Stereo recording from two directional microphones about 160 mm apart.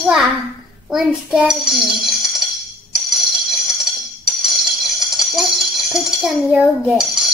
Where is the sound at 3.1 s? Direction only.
Centre (ahead or behind).